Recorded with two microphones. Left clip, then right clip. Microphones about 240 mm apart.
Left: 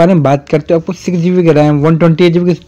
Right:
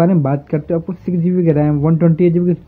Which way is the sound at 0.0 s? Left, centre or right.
Left.